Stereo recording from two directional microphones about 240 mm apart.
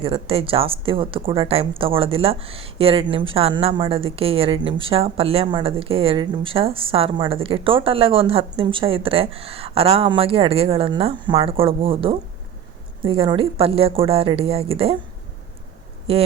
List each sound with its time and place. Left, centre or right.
0.0 s a woman's voice: right